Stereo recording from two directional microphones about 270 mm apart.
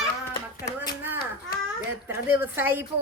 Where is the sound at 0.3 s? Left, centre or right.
Left.